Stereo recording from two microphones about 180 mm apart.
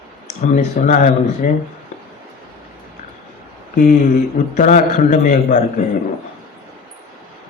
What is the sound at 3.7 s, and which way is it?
Speech, 50° left (ahead or behind).